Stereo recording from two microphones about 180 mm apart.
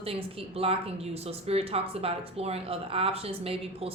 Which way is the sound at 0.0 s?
30° right (ahead or behind).